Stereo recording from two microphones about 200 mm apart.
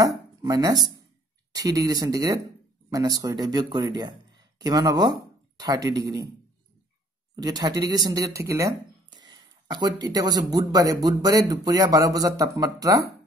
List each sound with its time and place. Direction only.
0.0 s dishes: 20° right (ahead or behind)
1.5 s speech: 20° right (ahead or behind)
7.3 s speech: 20° right (ahead or behind)